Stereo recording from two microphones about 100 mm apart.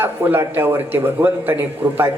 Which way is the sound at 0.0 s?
20° right (ahead or behind).